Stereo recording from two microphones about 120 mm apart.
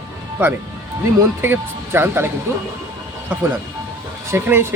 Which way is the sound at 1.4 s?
20° right (ahead or behind).